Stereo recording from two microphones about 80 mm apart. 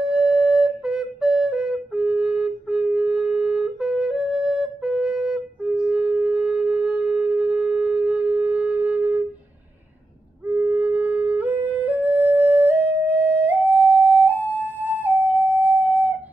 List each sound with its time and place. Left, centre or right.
0.0 s flute: centre
10.4 s music: right